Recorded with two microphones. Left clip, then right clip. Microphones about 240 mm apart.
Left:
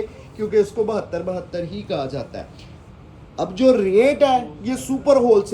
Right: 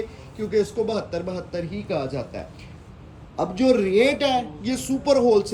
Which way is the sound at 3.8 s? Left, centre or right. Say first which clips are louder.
Left 4 dB; right.